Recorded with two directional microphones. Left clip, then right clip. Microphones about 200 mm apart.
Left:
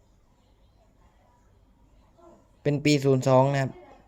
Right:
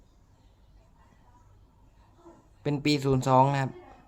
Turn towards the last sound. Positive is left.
turn(degrees=10)  # may be behind; listen again after turning